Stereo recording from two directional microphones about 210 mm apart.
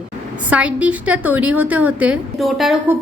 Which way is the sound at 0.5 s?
5° right (ahead or behind).